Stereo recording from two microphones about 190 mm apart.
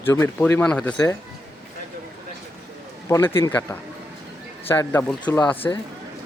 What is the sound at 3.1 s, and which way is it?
Speech, 10° left (ahead or behind).